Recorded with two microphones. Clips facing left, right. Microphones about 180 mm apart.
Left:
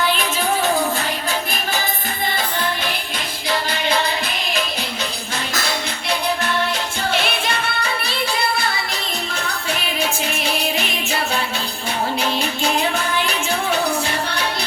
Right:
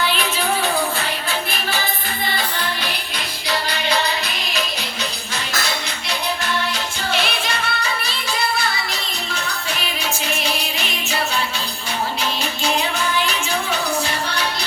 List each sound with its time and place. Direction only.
0.0 s music: 45° left (ahead or behind)
3.5 s music: 50° left (ahead or behind)
7.1 s music: 55° left (ahead or behind)
10.0 s music: 55° left (ahead or behind)